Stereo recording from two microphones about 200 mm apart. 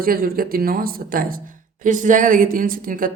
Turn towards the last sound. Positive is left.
turn(degrees=-45)  # may be behind; listen again after turning